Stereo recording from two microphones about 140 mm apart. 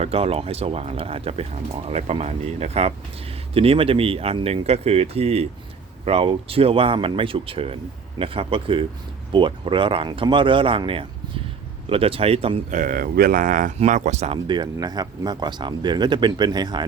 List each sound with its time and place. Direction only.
0.0 s speech: 45° right (ahead or behind)
12.7 s speech: 75° right (ahead or behind)
13.7 s speech: 60° right (ahead or behind)
14.4 s speech: 30° right (ahead or behind)